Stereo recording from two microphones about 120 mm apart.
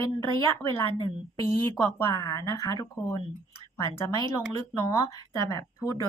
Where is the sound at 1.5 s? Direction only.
20° left (ahead or behind).